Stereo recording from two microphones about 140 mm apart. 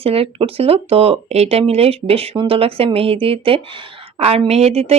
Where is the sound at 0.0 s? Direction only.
45° right (ahead or behind).